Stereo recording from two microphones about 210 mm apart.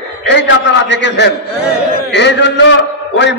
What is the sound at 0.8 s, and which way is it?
A man's voice, 55° left (ahead or behind).